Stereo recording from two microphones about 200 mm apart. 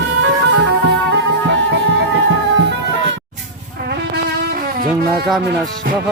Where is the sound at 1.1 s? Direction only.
65° right (ahead or behind).